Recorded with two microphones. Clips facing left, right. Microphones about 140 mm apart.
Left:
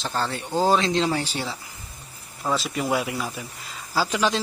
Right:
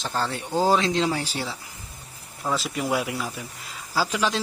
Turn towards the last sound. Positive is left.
turn(degrees=0)  # may be behind; listen again after turning